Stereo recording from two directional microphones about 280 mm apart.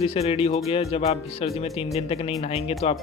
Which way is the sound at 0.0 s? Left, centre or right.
Left.